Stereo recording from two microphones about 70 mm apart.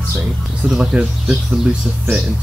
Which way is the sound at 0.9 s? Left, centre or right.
Centre.